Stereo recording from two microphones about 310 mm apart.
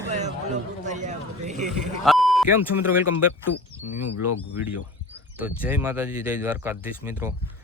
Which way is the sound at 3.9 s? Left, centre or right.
Left.